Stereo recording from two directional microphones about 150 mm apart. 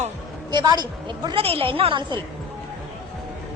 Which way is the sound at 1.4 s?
40° right (ahead or behind).